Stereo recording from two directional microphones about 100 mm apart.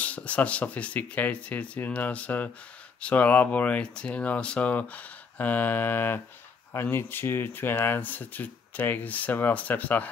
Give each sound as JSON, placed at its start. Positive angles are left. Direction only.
{"t": 0.0, "sound": "speech", "side_deg": 15}